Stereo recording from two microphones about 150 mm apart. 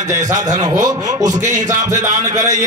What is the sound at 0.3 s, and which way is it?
A man's voice, 25° right (ahead or behind).